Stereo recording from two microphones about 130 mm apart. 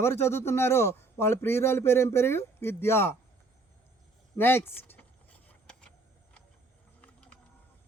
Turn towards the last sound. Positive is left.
turn(degrees=10)  # may be behind; listen again after turning